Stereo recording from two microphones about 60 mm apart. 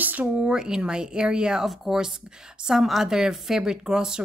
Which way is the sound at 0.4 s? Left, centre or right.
Centre.